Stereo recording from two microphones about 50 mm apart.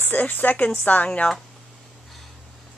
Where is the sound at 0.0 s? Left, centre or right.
Left.